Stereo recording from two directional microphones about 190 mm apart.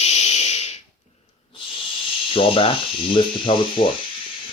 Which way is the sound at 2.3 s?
30° left (ahead or behind).